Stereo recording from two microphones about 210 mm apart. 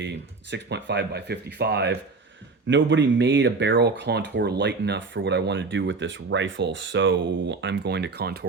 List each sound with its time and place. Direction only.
0.5 s speech: 55° right (ahead or behind)